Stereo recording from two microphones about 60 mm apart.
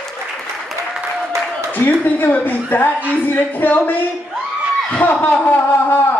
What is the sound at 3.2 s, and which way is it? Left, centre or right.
A man's voice, left.